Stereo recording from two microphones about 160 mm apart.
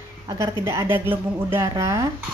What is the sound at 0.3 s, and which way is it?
A woman's voice, 20° right (ahead or behind).